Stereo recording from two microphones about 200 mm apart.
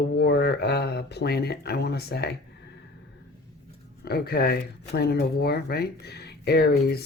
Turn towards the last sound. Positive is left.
turn(degrees=55)  # may be behind; listen again after turning